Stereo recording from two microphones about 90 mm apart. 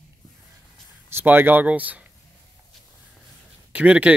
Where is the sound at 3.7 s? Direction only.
15° right (ahead or behind).